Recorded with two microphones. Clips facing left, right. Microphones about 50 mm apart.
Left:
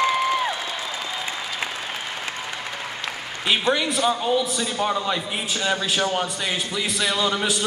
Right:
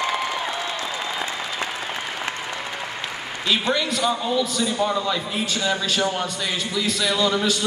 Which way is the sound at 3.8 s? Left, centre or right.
Centre.